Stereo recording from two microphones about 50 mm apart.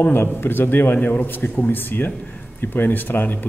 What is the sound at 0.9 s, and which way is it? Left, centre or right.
Speech, left.